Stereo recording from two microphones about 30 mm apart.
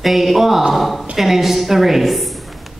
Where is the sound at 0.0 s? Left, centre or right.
Centre.